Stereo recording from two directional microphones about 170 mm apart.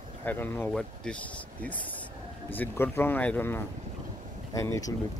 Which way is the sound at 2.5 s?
10° left (ahead or behind).